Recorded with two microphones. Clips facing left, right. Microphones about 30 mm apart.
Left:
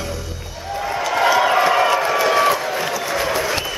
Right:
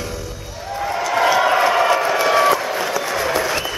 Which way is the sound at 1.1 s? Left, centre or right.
Centre.